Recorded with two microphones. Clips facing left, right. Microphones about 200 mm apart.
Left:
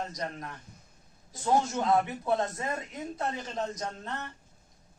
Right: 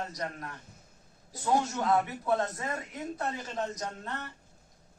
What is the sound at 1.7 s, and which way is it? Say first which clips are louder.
Speech: left 1 dB; 25° left (ahead or behind).